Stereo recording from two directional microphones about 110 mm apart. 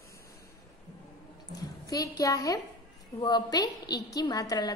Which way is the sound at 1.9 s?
35° left (ahead or behind).